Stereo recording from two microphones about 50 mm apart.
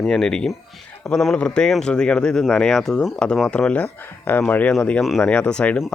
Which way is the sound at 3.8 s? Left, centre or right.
Left.